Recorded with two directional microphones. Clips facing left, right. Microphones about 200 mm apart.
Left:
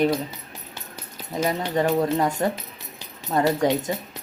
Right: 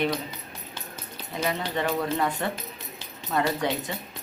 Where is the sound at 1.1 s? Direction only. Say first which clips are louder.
Left 4 dB; 40° left (ahead or behind).